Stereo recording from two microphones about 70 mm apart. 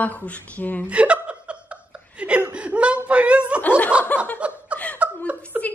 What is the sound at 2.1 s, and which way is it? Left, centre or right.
Chuckle, centre.